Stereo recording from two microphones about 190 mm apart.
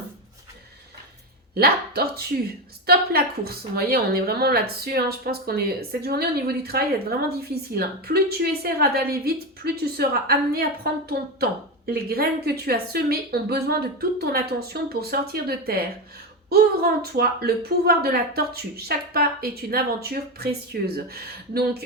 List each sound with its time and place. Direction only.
1.5 s a woman's voice: 55° right (ahead or behind)